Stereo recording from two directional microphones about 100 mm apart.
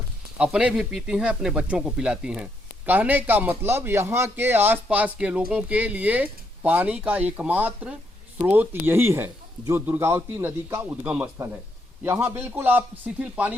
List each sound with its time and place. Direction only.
0.3 s a man's voice: 10° right (ahead or behind)
12.0 s a man's voice: 25° right (ahead or behind)